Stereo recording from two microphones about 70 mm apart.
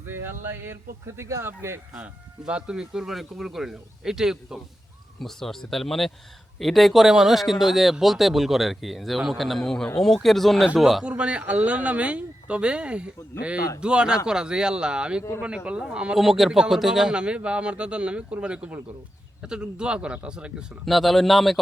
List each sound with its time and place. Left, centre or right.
0.0 s speech: right
2.4 s a man's voice: centre
5.2 s speech: centre
11.0 s a man's voice: centre
16.1 s a man's voice: centre
20.8 s speech: centre